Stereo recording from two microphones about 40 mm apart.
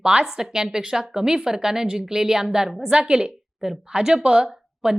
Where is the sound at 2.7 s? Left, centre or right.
Centre.